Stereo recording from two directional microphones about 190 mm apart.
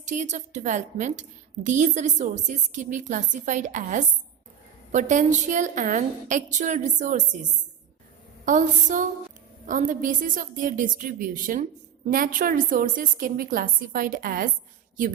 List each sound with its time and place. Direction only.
0.0 s a woman's voice: 40° right (ahead or behind)
8.4 s a woman's voice: 45° right (ahead or behind)